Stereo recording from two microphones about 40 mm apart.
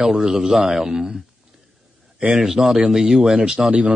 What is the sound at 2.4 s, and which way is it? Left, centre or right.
Speech, centre.